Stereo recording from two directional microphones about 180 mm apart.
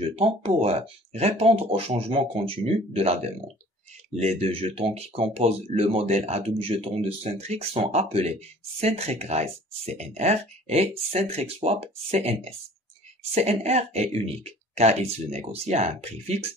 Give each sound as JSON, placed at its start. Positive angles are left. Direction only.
{"t": 0.0, "sound": "speech", "side_deg": -35}